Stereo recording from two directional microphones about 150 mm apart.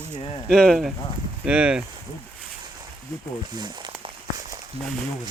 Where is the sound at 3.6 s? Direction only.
30° right (ahead or behind).